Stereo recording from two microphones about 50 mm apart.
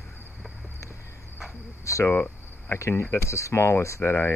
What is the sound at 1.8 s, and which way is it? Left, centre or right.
Speech, left.